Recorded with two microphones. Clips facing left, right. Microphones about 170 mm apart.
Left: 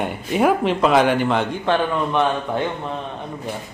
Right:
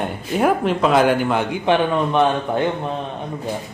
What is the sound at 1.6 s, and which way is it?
Speech, 20° right (ahead or behind).